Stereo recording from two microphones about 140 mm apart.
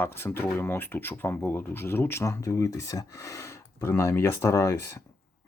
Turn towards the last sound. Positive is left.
turn(degrees=20)  # may be behind; listen again after turning